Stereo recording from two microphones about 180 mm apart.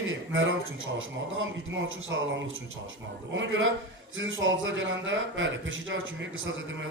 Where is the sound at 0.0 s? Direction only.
90° right.